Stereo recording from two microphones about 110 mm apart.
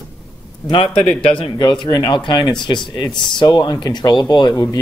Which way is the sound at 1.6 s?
40° left (ahead or behind).